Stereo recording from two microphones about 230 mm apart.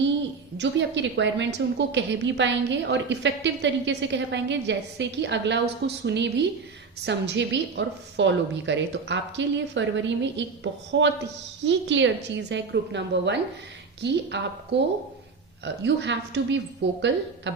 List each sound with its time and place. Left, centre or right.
0.5 s a woman's voice: right